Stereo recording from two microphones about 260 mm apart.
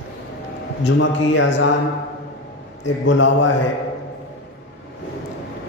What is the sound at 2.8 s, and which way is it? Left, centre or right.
Speech, left.